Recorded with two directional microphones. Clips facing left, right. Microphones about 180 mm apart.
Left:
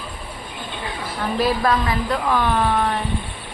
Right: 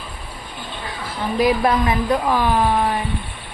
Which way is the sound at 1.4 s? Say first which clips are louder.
Right 3 dB; 15° right (ahead or behind).